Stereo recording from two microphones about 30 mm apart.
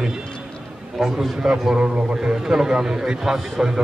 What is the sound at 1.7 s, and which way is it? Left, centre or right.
Speech, right.